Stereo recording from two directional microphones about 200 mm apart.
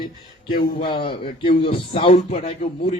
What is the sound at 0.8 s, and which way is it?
A man's voice, 25° left (ahead or behind).